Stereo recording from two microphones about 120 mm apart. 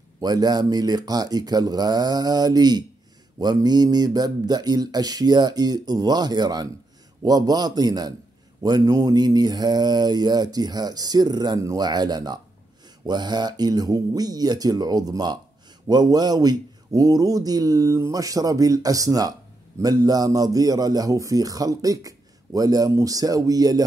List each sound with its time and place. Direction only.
0.2 s a man's voice: 35° right (ahead or behind)